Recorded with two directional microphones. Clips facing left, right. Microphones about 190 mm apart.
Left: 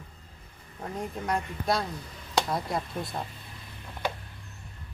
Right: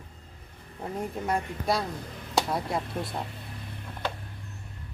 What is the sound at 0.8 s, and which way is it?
Speech, 10° right (ahead or behind).